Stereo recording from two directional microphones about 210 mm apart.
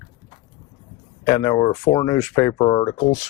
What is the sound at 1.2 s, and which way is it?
Speech, 15° left (ahead or behind).